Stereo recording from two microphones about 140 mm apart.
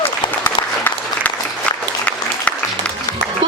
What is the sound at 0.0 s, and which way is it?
Applause, 15° left (ahead or behind).